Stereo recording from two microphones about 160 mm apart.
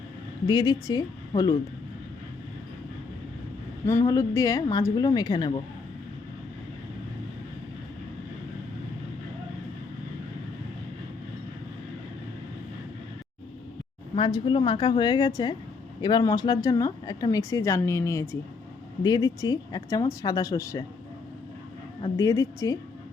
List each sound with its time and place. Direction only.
0.4 s speech: 25° left (ahead or behind)
3.8 s speech: 15° left (ahead or behind)
14.2 s speech: 30° left (ahead or behind)
22.1 s speech: 20° left (ahead or behind)